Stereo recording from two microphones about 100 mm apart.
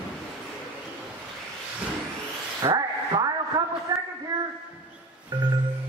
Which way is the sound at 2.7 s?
40° right (ahead or behind).